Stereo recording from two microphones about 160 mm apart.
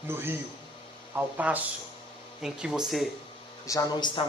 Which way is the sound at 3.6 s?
25° left (ahead or behind).